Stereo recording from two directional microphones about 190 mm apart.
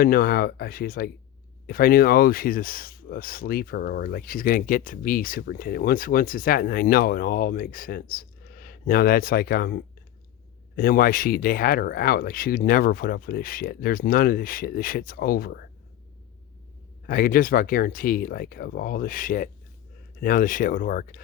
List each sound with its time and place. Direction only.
0.0 s speech: 50° left (ahead or behind)
17.1 s speech: 50° left (ahead or behind)